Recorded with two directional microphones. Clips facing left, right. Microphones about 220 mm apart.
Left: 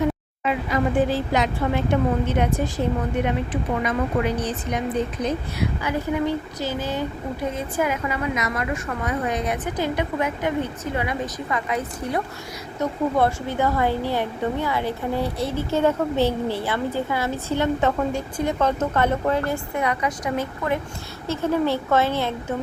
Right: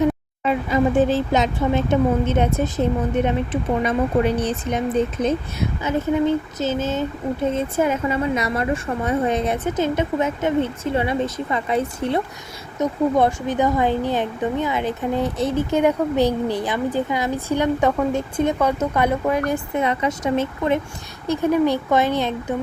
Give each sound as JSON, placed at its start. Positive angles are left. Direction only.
{"t": 0.4, "sound": "a woman's voice", "side_deg": -25}